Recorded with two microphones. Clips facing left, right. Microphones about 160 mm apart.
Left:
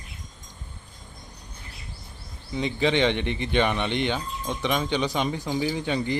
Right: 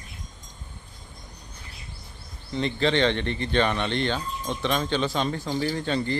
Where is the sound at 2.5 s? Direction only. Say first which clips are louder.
Even; 10° left (ahead or behind).